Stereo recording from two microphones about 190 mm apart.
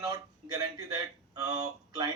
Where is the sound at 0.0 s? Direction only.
20° right (ahead or behind).